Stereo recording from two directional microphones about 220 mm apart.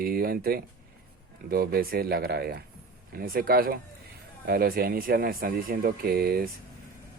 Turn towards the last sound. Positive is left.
turn(degrees=-45)  # may be behind; listen again after turning